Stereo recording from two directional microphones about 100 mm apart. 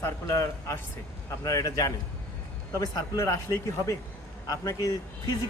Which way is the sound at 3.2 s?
30° left (ahead or behind).